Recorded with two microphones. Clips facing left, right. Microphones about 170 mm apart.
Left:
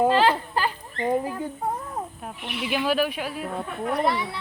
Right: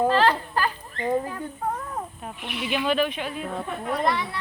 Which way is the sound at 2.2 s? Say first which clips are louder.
Even; 5° left (ahead or behind).